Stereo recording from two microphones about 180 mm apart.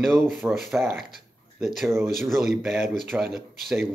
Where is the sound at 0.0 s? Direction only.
5° right (ahead or behind).